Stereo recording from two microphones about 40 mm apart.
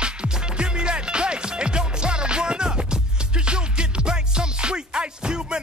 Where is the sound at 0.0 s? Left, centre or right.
Right.